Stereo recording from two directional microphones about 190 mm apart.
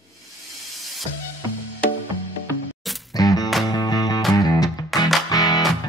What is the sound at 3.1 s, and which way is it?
Music, 20° left (ahead or behind).